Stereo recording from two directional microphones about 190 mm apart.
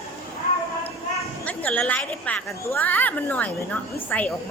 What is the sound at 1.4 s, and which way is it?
A woman's voice, 5° left (ahead or behind).